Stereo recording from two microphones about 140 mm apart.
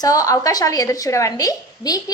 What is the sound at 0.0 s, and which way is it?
A woman's voice, 25° left (ahead or behind).